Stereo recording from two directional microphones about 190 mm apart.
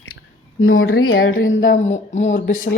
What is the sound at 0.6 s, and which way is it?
Speech, 90° left.